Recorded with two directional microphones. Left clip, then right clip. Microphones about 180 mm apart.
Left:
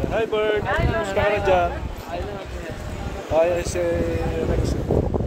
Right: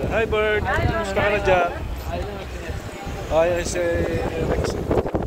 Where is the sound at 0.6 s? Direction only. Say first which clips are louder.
Even; 40° right (ahead or behind).